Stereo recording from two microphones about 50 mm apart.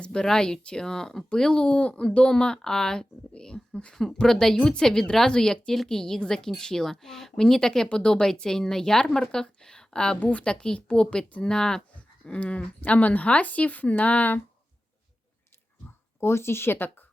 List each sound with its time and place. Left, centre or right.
0.0 s a woman's voice: centre; by 14.4 s left
16.2 s speech: left